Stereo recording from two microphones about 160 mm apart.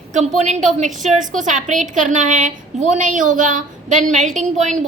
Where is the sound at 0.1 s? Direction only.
50° right (ahead or behind).